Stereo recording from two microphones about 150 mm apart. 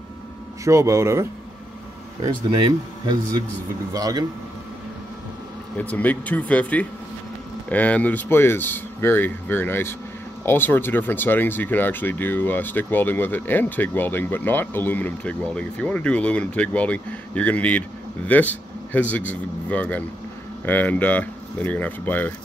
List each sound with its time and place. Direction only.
0.7 s speech: 20° right (ahead or behind)
3.1 s speech: 25° right (ahead or behind)
5.8 s speech: 10° left (ahead or behind)